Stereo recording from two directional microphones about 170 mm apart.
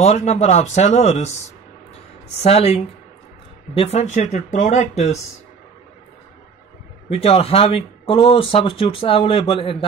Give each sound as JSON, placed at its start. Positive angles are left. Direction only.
{"t": 0.0, "sound": "speech", "side_deg": 40}
{"t": 2.4, "sound": "speech", "side_deg": 35}
{"t": 7.1, "sound": "speech", "side_deg": 35}